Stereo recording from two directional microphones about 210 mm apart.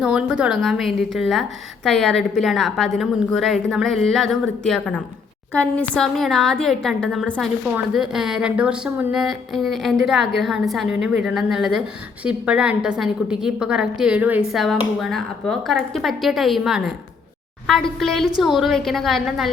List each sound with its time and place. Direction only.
0.0 s a woman's voice: 5° right (ahead or behind)